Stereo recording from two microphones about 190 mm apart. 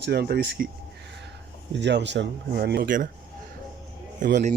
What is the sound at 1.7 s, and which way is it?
Speech, 65° right (ahead or behind).